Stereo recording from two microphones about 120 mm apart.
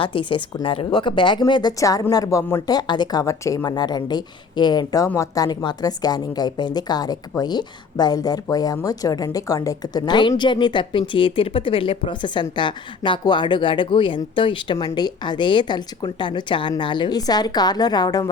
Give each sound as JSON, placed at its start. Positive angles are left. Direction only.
{"t": 0.0, "sound": "speech", "side_deg": 45}